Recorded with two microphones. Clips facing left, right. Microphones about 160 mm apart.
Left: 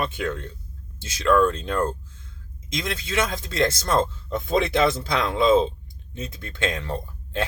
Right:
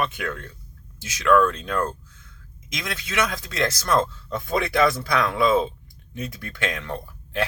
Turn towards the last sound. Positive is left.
turn(degrees=30)  # may be behind; listen again after turning